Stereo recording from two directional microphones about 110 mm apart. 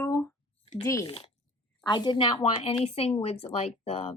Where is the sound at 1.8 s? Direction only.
45° left (ahead or behind).